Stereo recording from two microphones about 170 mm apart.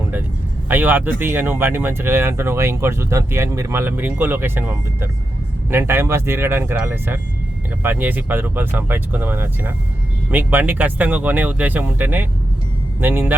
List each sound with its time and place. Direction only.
0.7 s speech: 10° right (ahead or behind)